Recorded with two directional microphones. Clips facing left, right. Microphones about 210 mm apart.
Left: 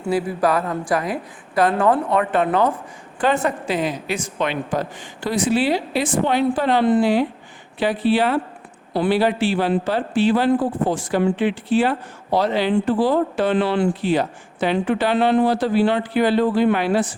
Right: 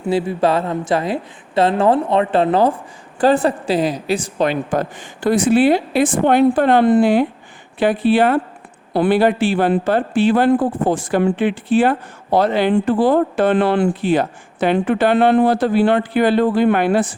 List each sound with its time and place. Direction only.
0.0 s a woman's voice: 25° right (ahead or behind)
4.7 s speech: 50° right (ahead or behind)